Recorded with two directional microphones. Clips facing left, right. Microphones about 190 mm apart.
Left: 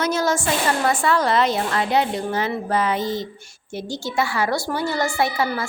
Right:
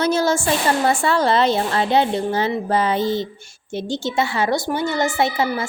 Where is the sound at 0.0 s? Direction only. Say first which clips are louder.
Right 3 dB; 30° right (ahead or behind).